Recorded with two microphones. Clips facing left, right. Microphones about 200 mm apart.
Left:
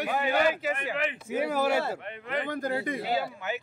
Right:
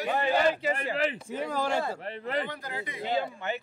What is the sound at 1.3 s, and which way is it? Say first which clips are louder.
Speech: left 3 dB; 5° left (ahead or behind).